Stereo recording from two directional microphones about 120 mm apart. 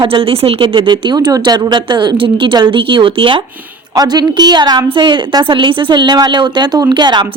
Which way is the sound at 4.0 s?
35° right (ahead or behind).